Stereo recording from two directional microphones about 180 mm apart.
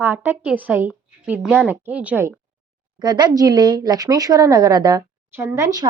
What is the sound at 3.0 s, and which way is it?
Speech, 25° right (ahead or behind).